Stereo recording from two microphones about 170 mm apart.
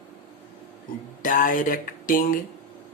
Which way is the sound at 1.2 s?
50° left (ahead or behind).